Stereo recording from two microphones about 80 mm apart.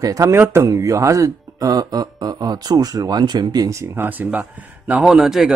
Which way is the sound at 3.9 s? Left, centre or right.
Right.